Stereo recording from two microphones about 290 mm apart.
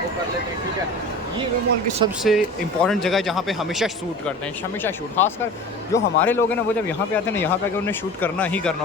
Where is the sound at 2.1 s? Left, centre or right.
Centre.